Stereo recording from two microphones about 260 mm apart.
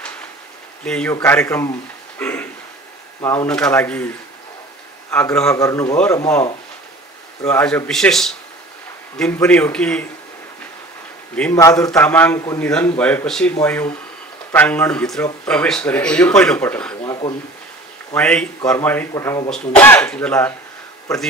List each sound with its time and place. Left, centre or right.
0.8 s a man's voice: centre
2.1 s a sound: centre
3.2 s speech: centre
5.1 s a man's voice: centre
7.4 s speech: centre
11.3 s a man's voice: centre
17.0 s a sound: centre
18.1 s a man's voice: centre